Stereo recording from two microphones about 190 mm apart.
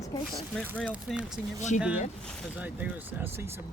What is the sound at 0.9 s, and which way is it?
Speech, 5° right (ahead or behind).